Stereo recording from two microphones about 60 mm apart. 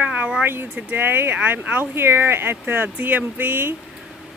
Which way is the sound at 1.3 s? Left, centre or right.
Right.